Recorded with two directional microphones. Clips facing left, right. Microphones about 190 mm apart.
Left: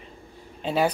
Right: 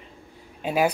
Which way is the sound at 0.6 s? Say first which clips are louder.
Right 1 dB; 10° right (ahead or behind).